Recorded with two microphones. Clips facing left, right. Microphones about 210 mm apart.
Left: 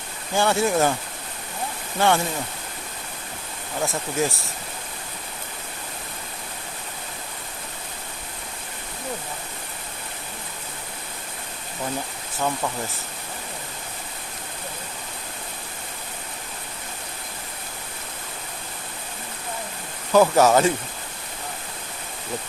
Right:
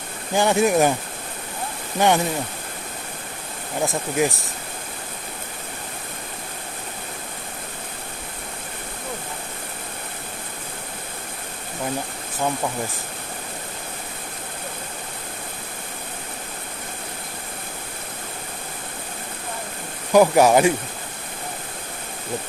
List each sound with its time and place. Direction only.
0.3 s speech: 15° right (ahead or behind)
2.0 s speech: 15° right (ahead or behind)
3.8 s speech: 15° right (ahead or behind)
20.1 s speech: 15° right (ahead or behind)